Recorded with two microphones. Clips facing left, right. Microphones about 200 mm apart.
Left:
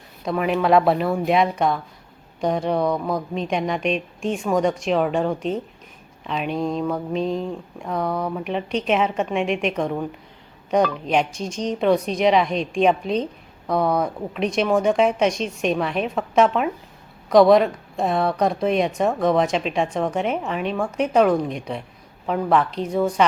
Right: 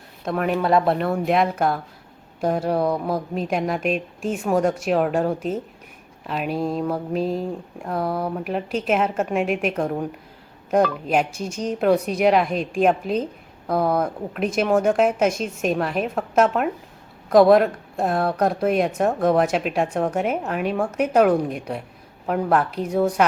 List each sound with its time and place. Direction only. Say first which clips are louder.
0.3 s mantra: left 1 dB; centre (ahead or behind)
20.1 s a woman's voice: even; 5° right (ahead or behind)